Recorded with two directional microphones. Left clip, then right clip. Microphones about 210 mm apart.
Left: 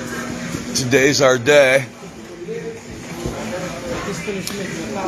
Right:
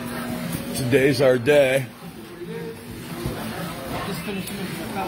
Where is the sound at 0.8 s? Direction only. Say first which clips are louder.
Left 4 dB; 15° right (ahead or behind).